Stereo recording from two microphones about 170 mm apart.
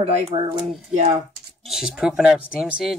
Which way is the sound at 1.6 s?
Centre (ahead or behind).